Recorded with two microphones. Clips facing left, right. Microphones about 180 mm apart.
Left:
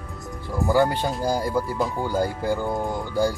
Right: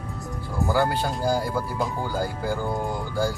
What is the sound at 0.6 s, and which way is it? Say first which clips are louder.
Speech: left 3 dB; 20° left (ahead or behind).